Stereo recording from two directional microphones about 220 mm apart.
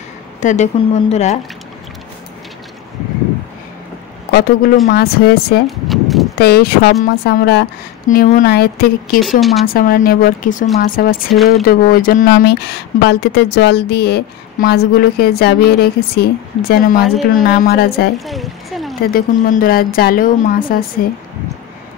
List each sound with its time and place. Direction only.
0.4 s a woman's voice: 35° left (ahead or behind)
4.3 s speech: 45° left (ahead or behind)
5.9 s clip-clop: centre (ahead or behind)
6.3 s speech: 45° left (ahead or behind)
9.2 s a woman's voice: centre (ahead or behind)
9.7 s a woman's voice: 40° left (ahead or behind)
18.2 s speech: centre (ahead or behind)
19.1 s a woman's voice: 35° left (ahead or behind)